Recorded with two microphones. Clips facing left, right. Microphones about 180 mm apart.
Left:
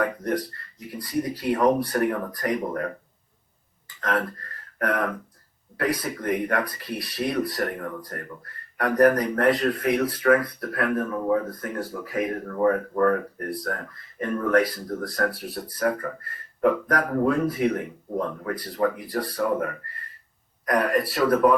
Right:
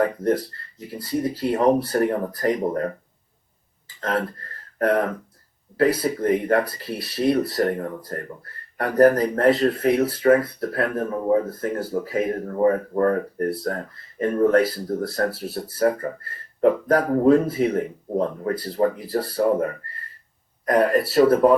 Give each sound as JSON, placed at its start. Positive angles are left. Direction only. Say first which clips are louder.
{"t": 0.0, "sound": "speech", "louder": "right 4 dB", "side_deg": -25}
{"t": 4.0, "sound": "speech", "louder": "right 2 dB", "side_deg": -30}